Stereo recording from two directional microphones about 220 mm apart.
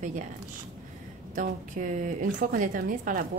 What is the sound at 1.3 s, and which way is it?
Speech, 35° right (ahead or behind).